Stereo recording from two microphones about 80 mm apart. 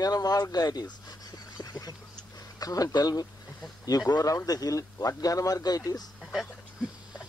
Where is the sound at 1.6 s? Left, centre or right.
Left.